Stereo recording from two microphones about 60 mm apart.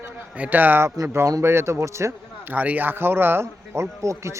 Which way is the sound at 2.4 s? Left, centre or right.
Right.